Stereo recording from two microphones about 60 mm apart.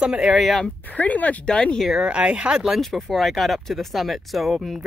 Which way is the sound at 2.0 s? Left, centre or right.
Centre.